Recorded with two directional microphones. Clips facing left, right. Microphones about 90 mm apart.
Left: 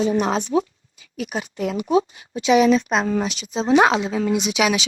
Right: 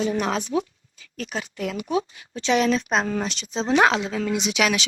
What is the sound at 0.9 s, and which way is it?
Speech, 15° left (ahead or behind).